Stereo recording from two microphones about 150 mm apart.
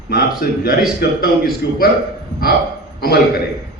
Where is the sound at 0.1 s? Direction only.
90° left.